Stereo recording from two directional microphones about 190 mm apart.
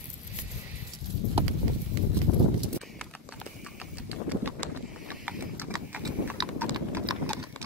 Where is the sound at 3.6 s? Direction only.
5° right (ahead or behind).